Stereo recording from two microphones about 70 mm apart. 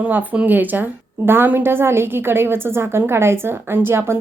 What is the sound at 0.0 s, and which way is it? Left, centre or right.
A woman's voice, right.